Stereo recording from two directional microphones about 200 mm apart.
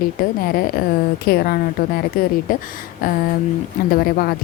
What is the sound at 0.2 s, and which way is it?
A woman's voice, 45° left (ahead or behind).